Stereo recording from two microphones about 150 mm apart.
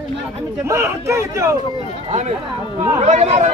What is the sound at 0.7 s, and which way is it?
Speech, 20° right (ahead or behind).